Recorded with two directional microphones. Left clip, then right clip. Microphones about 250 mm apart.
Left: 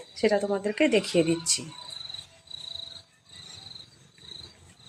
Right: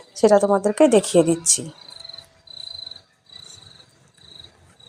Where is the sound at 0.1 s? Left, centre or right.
Right.